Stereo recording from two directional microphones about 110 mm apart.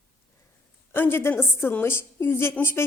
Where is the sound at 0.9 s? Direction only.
20° left (ahead or behind).